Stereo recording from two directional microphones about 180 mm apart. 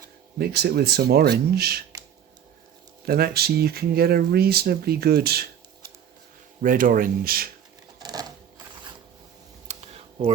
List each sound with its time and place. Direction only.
0.3 s speech: 60° right (ahead or behind)
3.1 s speech: 60° right (ahead or behind)
8.0 s a sound: 20° right (ahead or behind)
9.6 s computer keyboard: 35° right (ahead or behind)